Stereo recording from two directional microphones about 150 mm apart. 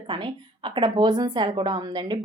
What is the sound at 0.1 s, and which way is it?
A woman's voice, 35° right (ahead or behind).